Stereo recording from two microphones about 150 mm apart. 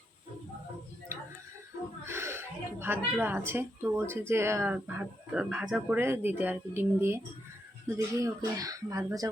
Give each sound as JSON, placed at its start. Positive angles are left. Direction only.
{"t": 2.0, "sound": "a woman's voice", "side_deg": -15}